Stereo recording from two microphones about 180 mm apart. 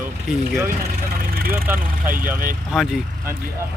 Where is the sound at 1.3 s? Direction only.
55° right (ahead or behind).